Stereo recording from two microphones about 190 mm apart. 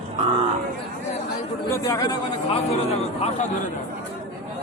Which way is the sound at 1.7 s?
20° left (ahead or behind).